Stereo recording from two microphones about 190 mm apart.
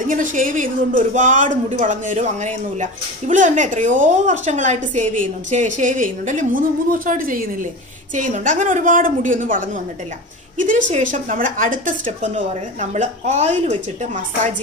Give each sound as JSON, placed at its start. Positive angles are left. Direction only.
{"t": 0.0, "sound": "a woman's voice", "side_deg": -45}
{"t": 10.9, "sound": "speech", "side_deg": -40}